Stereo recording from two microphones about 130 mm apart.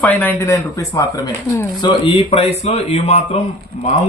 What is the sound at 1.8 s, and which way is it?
A man's voice, 50° left (ahead or behind).